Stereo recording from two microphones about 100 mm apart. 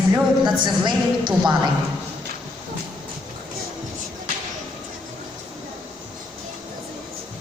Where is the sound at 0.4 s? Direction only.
50° right (ahead or behind).